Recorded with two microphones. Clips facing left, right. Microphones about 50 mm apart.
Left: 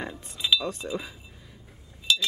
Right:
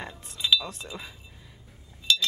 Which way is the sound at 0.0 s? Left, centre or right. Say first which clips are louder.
Left 1 dB; centre.